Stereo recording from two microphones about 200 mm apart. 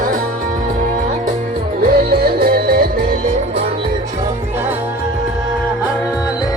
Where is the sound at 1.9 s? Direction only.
50° right (ahead or behind).